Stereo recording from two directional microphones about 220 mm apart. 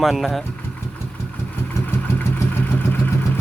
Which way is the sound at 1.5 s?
10° left (ahead or behind).